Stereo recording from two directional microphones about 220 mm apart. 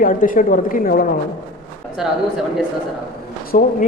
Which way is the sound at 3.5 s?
40° left (ahead or behind).